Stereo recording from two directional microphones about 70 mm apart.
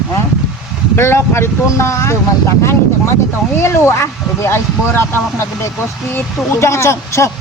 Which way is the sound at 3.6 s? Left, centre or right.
Left.